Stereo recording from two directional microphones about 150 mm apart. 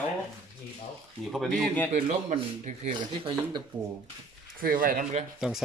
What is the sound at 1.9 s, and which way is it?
Speech, 45° right (ahead or behind).